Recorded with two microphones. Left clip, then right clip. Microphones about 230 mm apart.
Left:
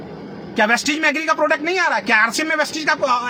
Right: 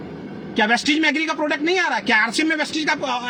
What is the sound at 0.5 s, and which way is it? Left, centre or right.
A man's voice, left.